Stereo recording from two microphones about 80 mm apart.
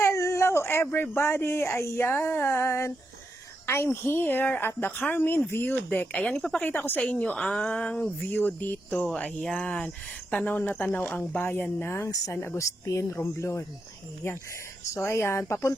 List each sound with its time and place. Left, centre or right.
0.0 s speech: left
4.0 s speech: left; by 6.7 s centre
6.7 s speech: left
14.8 s speech: left